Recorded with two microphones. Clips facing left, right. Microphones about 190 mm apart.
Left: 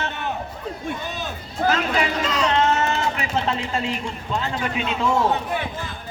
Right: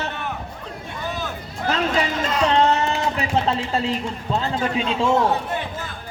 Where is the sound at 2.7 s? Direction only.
35° right (ahead or behind).